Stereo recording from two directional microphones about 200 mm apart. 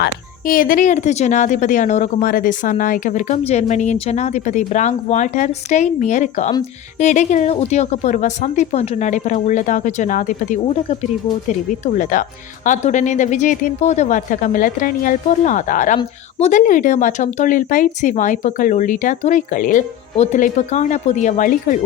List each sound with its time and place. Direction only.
0.0 s speech: 45° left (ahead or behind)